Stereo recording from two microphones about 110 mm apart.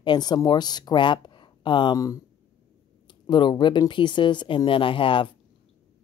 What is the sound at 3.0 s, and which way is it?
Speech, 45° left (ahead or behind).